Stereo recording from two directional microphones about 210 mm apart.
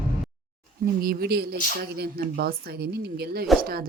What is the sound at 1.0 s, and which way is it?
Speech, 45° right (ahead or behind).